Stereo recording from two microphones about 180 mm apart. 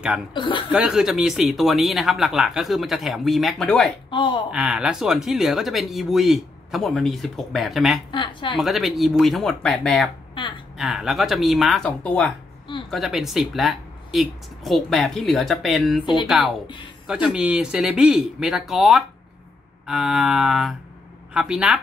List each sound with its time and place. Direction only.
0.3 s speech: 25° left (ahead or behind)
0.7 s speech: 5° right (ahead or behind)
4.1 s speech: 25° left (ahead or behind)
4.5 s speech: 5° right (ahead or behind)
8.1 s speech: 25° left (ahead or behind)
8.5 s speech: centre (ahead or behind)
16.6 s speech: 25° left (ahead or behind)
17.1 s speech: 5° right (ahead or behind)